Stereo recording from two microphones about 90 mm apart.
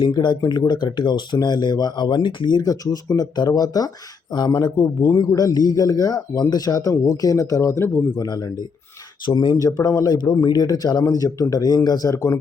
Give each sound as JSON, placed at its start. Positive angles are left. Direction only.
{"t": 0.2, "sound": "speech", "side_deg": 55}
{"t": 8.1, "sound": "speech", "side_deg": 50}